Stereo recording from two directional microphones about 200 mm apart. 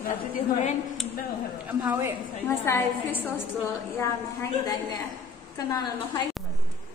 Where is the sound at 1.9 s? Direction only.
15° right (ahead or behind).